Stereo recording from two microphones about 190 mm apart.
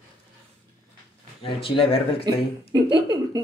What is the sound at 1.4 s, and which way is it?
Speech, 30° left (ahead or behind).